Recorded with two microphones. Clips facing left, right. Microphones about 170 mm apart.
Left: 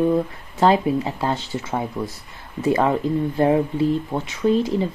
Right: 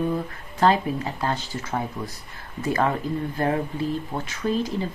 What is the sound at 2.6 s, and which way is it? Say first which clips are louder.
Speech: left 4 dB; 20° left (ahead or behind).